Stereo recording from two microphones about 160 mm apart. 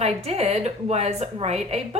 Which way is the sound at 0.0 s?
40° right (ahead or behind).